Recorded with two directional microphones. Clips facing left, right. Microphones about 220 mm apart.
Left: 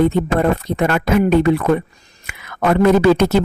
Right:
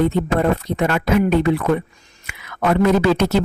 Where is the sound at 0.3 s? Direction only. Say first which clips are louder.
Left 1 dB; 50° left (ahead or behind).